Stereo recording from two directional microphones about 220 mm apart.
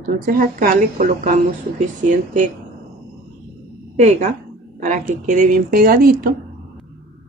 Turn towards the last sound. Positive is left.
turn(degrees=-40)  # may be behind; listen again after turning